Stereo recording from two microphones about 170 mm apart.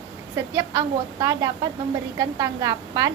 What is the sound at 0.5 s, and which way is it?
A woman's voice, 20° right (ahead or behind).